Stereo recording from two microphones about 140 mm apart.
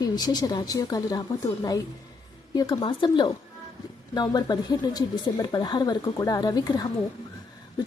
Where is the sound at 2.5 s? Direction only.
30° left (ahead or behind).